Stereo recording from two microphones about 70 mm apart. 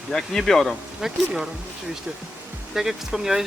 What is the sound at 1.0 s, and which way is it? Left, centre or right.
Speech, centre.